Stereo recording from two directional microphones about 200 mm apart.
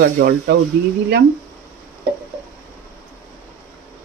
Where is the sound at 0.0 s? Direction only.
50° right (ahead or behind).